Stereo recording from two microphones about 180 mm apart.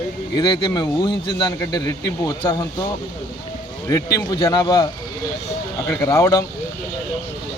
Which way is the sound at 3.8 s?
15° left (ahead or behind).